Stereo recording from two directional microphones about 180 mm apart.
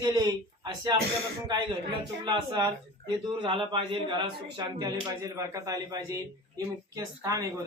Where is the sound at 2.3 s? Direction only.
25° right (ahead or behind).